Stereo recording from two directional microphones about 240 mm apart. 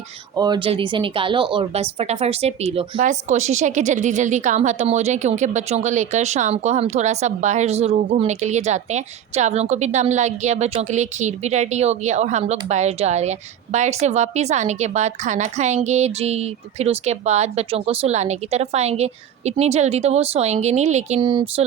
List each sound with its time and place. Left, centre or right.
0.3 s a woman's voice: centre